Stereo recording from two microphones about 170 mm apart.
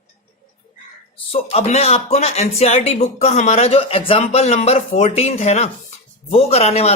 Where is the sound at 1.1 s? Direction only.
35° left (ahead or behind).